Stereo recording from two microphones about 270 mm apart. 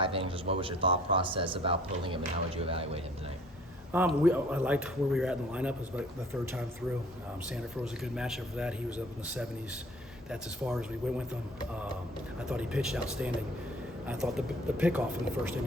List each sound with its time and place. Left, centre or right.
0.0 s speech: centre
3.9 s speech: centre
8.0 s speech: centre
12.5 s speech: centre